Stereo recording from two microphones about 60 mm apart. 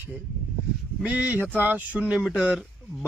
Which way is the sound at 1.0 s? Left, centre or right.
Right.